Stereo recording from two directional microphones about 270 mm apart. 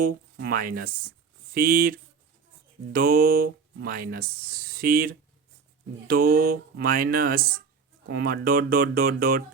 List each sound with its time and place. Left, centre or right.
0.0 s speech: right